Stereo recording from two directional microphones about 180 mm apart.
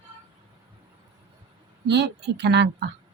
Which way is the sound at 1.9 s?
70° right (ahead or behind).